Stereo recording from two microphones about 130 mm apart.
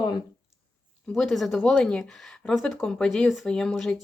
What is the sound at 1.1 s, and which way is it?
A woman's voice, centre (ahead or behind).